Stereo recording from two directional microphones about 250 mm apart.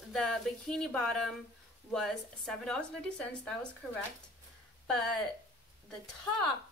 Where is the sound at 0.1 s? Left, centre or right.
Centre.